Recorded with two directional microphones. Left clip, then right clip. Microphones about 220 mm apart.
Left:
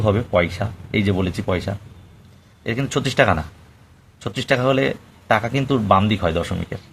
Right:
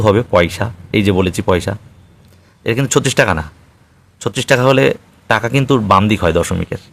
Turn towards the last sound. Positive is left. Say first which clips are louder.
# right 7 dB
turn(degrees=-40)  # may be behind; listen again after turning